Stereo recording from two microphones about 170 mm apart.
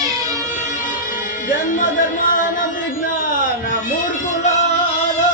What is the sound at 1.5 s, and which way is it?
Music, 50° left (ahead or behind).